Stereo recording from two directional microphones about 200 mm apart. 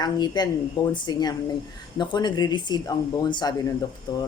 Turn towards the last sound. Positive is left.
turn(degrees=20)  # may be behind; listen again after turning